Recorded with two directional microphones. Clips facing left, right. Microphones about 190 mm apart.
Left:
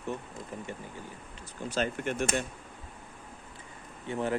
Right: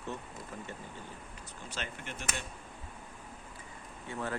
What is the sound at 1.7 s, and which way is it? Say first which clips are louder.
Speech: left 12 dB; 40° left (ahead or behind).